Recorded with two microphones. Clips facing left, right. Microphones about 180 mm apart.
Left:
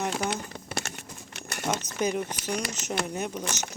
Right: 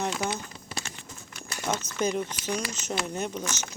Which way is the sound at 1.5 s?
65° left (ahead or behind).